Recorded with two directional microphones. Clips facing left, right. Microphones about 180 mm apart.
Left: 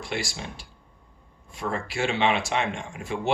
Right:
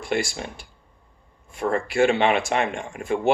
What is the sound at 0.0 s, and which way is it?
Speech, 50° right (ahead or behind).